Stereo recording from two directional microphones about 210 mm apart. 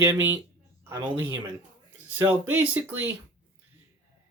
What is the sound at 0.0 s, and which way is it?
Speech, 10° right (ahead or behind).